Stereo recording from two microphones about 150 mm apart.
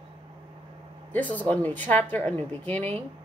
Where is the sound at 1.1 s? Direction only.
10° left (ahead or behind).